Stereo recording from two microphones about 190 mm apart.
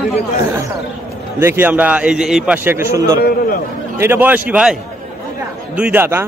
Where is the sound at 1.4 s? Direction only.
10° right (ahead or behind).